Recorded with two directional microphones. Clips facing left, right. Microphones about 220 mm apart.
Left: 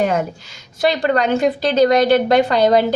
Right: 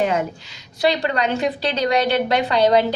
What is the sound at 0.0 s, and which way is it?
A woman's voice, 45° left (ahead or behind).